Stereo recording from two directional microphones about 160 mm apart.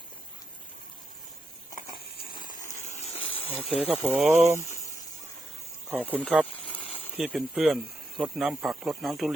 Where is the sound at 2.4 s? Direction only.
55° left (ahead or behind).